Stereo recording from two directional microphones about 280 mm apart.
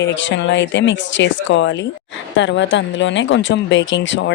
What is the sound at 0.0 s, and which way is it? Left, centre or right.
Speech, left.